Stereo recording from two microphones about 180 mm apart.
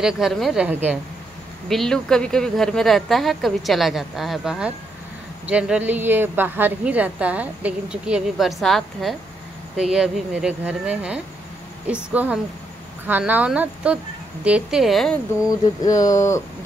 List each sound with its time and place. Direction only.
0.0 s speech: centre (ahead or behind)
1.7 s a woman's voice: centre (ahead or behind)
15.8 s speech: 20° left (ahead or behind)